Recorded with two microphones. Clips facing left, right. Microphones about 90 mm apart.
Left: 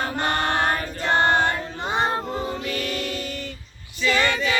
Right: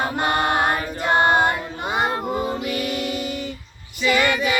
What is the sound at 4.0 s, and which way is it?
Female singing, 10° right (ahead or behind).